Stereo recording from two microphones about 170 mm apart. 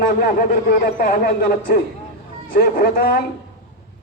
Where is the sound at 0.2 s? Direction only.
55° left (ahead or behind).